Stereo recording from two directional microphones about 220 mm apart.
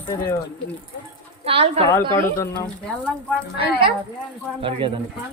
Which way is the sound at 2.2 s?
10° left (ahead or behind).